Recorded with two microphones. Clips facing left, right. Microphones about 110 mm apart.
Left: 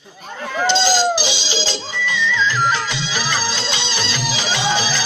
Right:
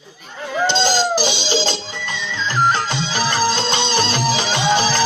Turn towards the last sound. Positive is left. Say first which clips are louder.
# right 3 dB
turn(degrees=-45)  # may be behind; listen again after turning